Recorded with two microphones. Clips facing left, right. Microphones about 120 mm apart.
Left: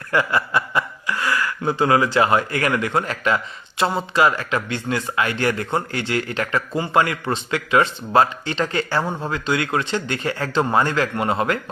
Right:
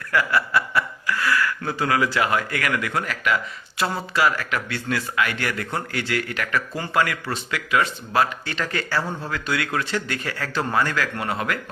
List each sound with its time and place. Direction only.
0.1 s chuckle: 25° left (ahead or behind)
2.1 s speech: 30° left (ahead or behind)